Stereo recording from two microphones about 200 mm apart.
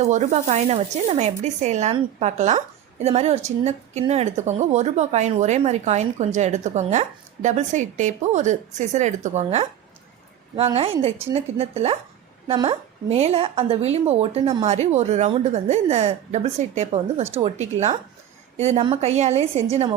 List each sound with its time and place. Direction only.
0.0 s speech: 35° right (ahead or behind)